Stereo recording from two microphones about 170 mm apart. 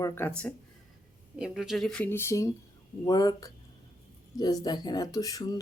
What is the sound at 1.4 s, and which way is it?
Speech, 5° right (ahead or behind).